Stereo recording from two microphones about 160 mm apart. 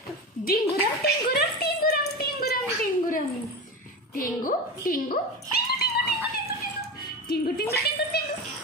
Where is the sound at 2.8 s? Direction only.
60° left (ahead or behind).